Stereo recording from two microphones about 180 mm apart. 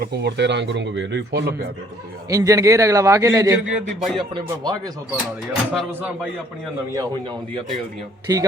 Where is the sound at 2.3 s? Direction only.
20° right (ahead or behind).